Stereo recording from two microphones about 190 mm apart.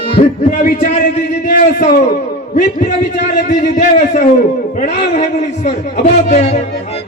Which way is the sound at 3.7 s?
40° left (ahead or behind).